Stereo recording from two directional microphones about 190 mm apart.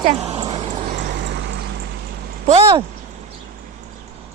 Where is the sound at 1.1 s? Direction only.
65° right (ahead or behind).